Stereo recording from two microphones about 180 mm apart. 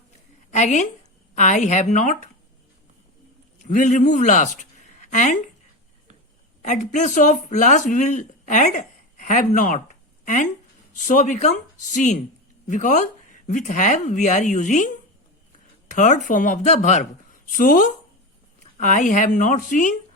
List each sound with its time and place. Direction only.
0.5 s a woman's voice: 40° left (ahead or behind)
3.6 s speech: 45° left (ahead or behind)
4.9 s a sound: 40° left (ahead or behind)
6.6 s speech: 40° left (ahead or behind)
15.9 s a woman's voice: 45° left (ahead or behind)